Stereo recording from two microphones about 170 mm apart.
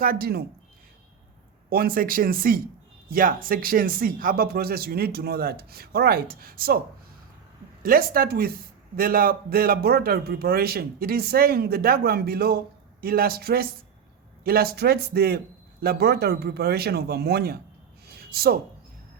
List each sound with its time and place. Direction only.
0.0 s a man's voice: 60° right (ahead or behind)
1.7 s a man's voice: 60° right (ahead or behind)
7.8 s a man's voice: 60° right (ahead or behind)
18.0 s a sound: 65° right (ahead or behind)